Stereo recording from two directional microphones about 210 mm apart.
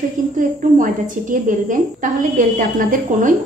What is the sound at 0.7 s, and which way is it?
A woman's voice, 40° right (ahead or behind).